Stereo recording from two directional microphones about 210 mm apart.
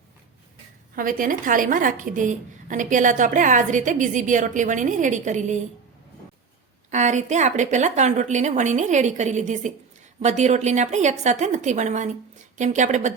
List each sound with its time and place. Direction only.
0.9 s a woman's voice: 40° right (ahead or behind)
6.9 s a woman's voice: 35° right (ahead or behind)